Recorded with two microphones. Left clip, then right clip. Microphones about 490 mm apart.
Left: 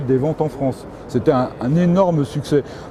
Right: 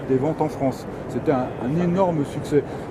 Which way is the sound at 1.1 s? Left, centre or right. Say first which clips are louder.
Left 6 dB; left.